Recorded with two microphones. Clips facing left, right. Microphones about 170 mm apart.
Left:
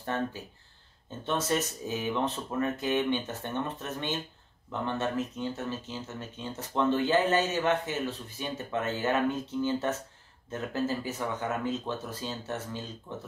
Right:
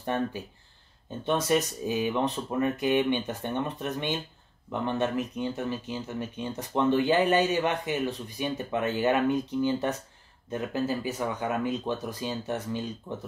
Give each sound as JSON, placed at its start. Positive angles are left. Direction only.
{"t": 0.0, "sound": "speech", "side_deg": -15}